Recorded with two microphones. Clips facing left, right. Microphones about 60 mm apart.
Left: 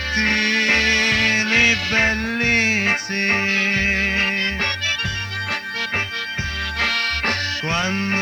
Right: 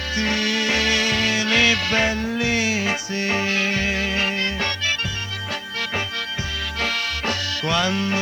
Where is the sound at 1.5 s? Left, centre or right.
Left.